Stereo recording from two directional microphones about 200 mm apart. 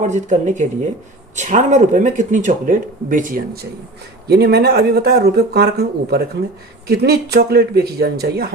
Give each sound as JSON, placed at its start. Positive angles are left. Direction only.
{"t": 0.0, "sound": "speech", "side_deg": -40}